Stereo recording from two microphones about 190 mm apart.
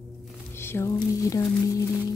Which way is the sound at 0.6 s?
15° left (ahead or behind).